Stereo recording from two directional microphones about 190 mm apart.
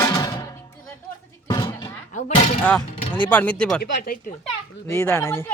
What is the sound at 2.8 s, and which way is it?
Speech, 25° left (ahead or behind).